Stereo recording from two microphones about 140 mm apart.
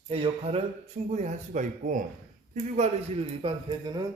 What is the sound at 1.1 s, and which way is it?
A man's voice, 55° right (ahead or behind).